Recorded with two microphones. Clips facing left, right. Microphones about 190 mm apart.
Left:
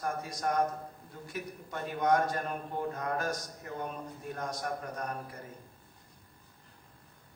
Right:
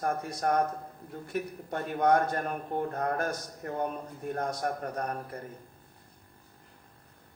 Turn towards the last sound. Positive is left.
turn(degrees=-55)  # may be behind; listen again after turning